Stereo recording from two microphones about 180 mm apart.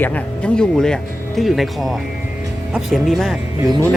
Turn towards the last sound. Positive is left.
turn(degrees=0)  # may be behind; listen again after turning